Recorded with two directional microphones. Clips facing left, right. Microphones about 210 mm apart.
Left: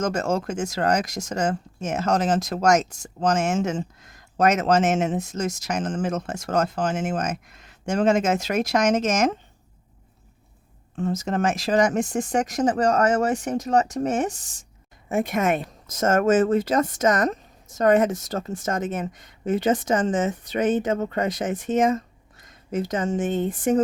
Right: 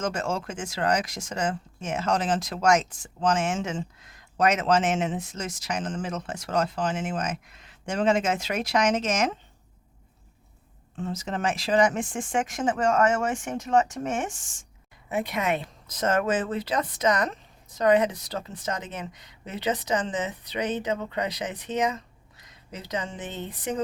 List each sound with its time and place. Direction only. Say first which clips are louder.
0.0 s speech: left 5 dB; 40° left (ahead or behind)
10.9 s speech: left 6 dB; 45° left (ahead or behind)
15.1 s speech: left 5 dB; 50° left (ahead or behind)